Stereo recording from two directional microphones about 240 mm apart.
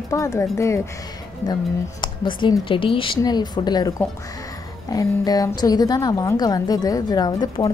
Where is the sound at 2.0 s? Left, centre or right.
Centre.